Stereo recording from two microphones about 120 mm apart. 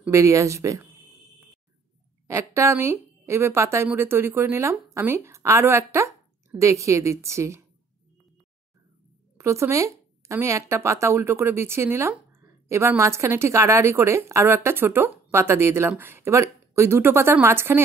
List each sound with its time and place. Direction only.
0.1 s speech: 25° right (ahead or behind)
2.2 s speech: 25° right (ahead or behind)
9.4 s speech: 25° right (ahead or behind)